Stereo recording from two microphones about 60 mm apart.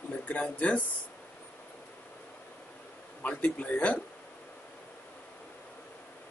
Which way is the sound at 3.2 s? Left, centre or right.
Left.